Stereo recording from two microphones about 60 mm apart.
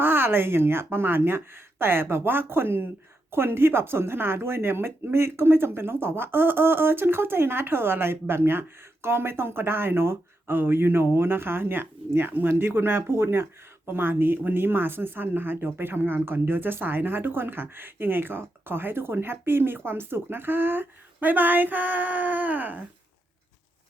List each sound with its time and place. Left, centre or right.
0.0 s speech: right